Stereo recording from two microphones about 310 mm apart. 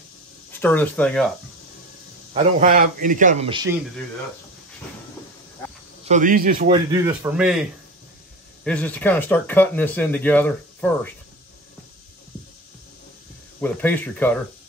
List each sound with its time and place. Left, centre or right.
0.5 s speech: centre
2.3 s a man's voice: right
6.0 s a man's voice: right
6.9 s speech: centre
8.6 s speech: centre
13.6 s speech: centre